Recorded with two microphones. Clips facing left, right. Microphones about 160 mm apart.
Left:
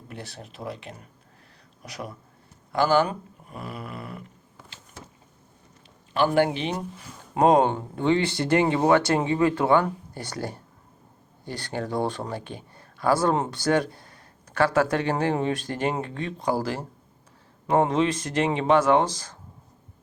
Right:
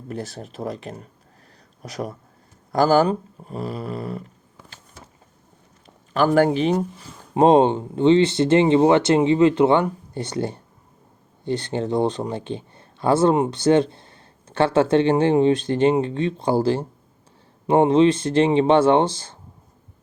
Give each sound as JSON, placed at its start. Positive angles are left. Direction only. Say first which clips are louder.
{"t": 0.1, "sound": "speech", "louder": "right 9 dB", "side_deg": -40}
{"t": 6.1, "sound": "speech", "louder": "right 5 dB", "side_deg": -45}
{"t": 7.3, "sound": "speech", "louder": "right 4 dB", "side_deg": -25}